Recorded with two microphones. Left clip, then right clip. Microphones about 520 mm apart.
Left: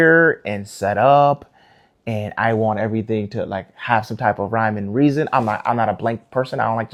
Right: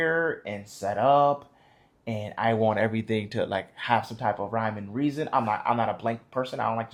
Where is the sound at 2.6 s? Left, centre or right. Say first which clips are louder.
Left 4 dB; left.